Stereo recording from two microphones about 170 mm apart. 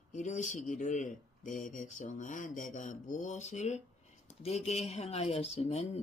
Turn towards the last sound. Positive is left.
turn(degrees=40)  # may be behind; listen again after turning